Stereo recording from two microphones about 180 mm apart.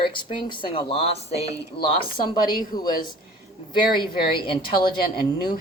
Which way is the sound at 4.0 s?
30° left (ahead or behind).